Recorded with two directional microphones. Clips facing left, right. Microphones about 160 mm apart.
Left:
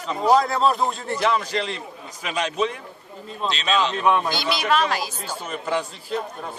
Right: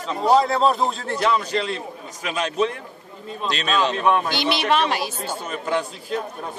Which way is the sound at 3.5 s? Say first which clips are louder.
Right 1 dB; 50° right (ahead or behind).